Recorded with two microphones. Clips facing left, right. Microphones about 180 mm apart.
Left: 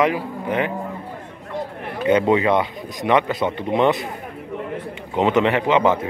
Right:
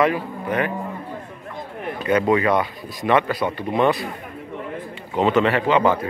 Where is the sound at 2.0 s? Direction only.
25° left (ahead or behind).